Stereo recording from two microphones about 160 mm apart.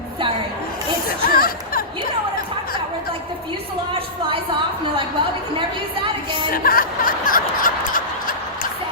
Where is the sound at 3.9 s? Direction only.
35° right (ahead or behind).